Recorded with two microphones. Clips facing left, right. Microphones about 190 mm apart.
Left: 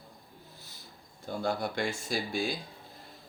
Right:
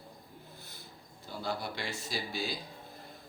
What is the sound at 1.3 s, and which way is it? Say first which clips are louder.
Speech: left 5 dB; 50° left (ahead or behind).